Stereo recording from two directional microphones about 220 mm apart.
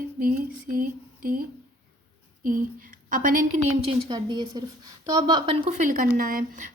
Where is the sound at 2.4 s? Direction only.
40° right (ahead or behind).